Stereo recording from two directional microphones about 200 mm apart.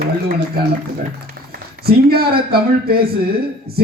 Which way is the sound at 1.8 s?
50° right (ahead or behind).